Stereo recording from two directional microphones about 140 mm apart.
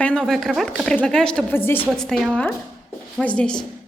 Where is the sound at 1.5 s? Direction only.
15° left (ahead or behind).